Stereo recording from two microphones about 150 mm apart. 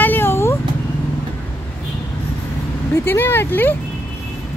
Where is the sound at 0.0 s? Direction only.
15° left (ahead or behind).